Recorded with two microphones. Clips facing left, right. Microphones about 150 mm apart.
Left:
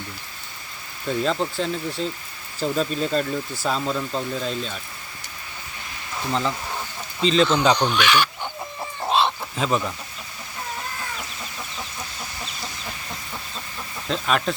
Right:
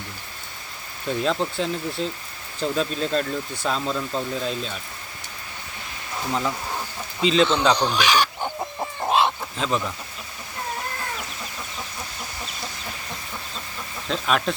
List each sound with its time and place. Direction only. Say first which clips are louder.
1.2 s speech: even; centre (ahead or behind)
7.2 s speech: left 1 dB; 5° right (ahead or behind)
7.8 s speech: left 1 dB; 35° right (ahead or behind)
9.0 s chicken: even; 10° right (ahead or behind)
9.6 s speech: left 2 dB; 5° left (ahead or behind)
14.1 s speech: even; centre (ahead or behind)